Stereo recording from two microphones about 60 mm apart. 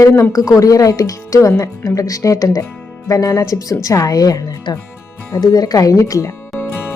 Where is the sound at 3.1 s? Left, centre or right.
Left.